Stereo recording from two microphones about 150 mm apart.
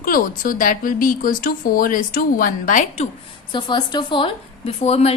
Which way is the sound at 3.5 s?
30° left (ahead or behind).